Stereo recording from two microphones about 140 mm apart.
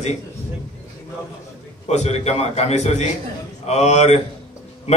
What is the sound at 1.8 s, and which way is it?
Speech, 50° left (ahead or behind).